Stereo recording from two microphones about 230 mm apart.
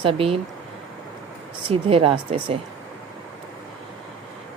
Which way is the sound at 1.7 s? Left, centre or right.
Right.